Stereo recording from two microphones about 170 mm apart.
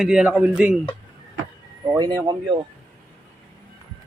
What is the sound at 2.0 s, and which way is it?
Speech, 25° right (ahead or behind).